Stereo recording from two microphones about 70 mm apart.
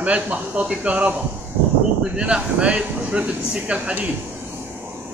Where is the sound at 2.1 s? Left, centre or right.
Centre.